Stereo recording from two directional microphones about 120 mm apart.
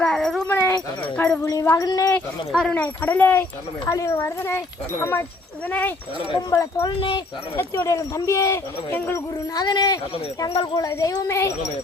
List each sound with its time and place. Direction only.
0.0 s a sound: 5° left (ahead or behind)
0.4 s dog: 20° left (ahead or behind)
1.1 s speech: 10° left (ahead or behind)
1.4 s speech: 30° left (ahead or behind)
2.5 s speech: centre (ahead or behind)
2.7 s speech: 15° left (ahead or behind)
6.5 s speech: 25° left (ahead or behind)
6.8 s speech: 40° left (ahead or behind)
7.5 s speech: 20° left (ahead or behind)
9.6 s speech: 35° left (ahead or behind)